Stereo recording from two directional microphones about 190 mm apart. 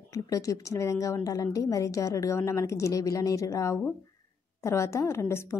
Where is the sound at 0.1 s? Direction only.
15° left (ahead or behind).